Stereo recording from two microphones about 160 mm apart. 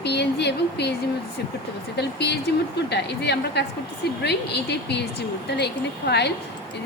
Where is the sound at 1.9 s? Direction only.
90° left.